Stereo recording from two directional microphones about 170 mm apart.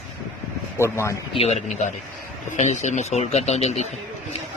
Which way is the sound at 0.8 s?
15° left (ahead or behind).